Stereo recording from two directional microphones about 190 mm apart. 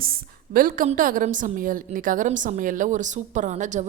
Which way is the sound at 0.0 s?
50° right (ahead or behind).